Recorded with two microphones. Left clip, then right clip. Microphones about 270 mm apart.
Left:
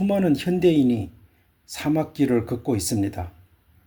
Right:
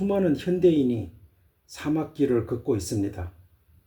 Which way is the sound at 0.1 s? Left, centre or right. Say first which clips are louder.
Left 2 dB; left.